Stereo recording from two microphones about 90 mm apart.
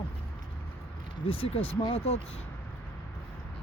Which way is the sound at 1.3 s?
90° left.